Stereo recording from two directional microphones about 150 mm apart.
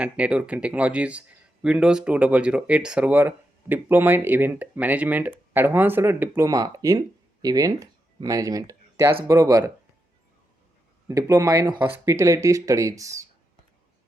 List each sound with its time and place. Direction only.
0.0 s speech: 10° right (ahead or behind); by 9.6 s 25° right (ahead or behind)
11.1 s speech: 25° right (ahead or behind)